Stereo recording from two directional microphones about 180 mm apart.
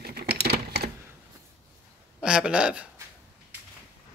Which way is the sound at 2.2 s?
5° right (ahead or behind).